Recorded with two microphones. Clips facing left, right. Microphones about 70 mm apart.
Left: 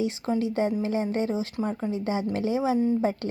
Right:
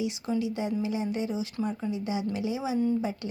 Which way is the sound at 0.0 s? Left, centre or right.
Left.